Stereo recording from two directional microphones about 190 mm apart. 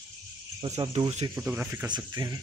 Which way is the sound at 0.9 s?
30° right (ahead or behind).